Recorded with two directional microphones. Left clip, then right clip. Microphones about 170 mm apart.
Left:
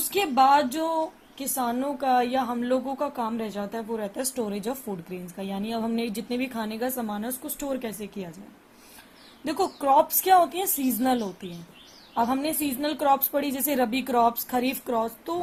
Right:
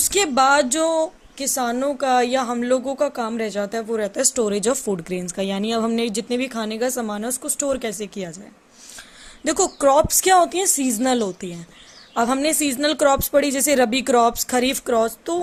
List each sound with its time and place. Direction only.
0.1 s a woman's voice: 45° right (ahead or behind)
9.4 s a woman's voice: 50° right (ahead or behind)